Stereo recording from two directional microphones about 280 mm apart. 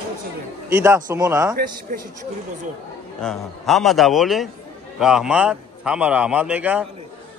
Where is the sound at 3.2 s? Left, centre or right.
Centre.